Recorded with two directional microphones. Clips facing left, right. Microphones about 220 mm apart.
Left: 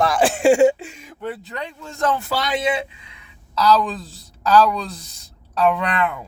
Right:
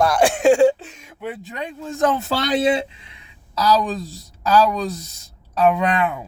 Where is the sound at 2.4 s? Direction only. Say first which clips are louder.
Right 6 dB; 35° right (ahead or behind).